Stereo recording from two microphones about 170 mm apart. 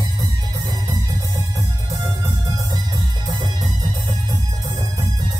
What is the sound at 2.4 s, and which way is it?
Music, 25° right (ahead or behind).